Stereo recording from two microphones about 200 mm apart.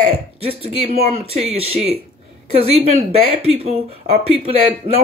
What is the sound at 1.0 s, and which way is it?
Speech, 30° right (ahead or behind).